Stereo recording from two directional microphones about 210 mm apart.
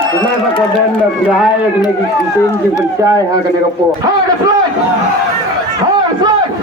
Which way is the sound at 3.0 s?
15° right (ahead or behind).